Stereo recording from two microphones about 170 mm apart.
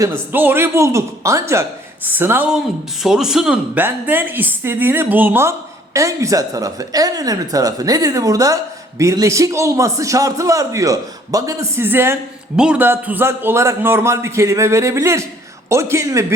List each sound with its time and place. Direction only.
0.0 s a man's voice: 15° right (ahead or behind)